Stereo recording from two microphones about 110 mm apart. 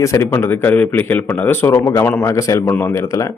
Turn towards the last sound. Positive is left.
turn(degrees=25)  # may be behind; listen again after turning